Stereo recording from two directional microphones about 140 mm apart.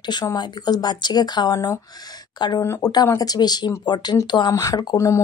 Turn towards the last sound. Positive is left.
turn(degrees=20)  # may be behind; listen again after turning